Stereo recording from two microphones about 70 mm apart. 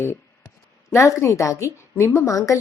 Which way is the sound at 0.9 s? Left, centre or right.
Left.